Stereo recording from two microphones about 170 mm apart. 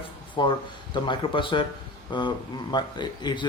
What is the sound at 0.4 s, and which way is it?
Speech, 25° left (ahead or behind).